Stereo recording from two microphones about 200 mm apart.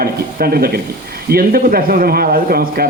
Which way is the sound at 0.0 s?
50° right (ahead or behind).